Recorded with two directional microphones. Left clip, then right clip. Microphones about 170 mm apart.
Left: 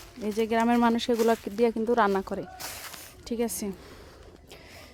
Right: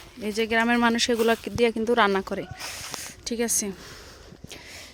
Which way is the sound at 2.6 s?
20° right (ahead or behind).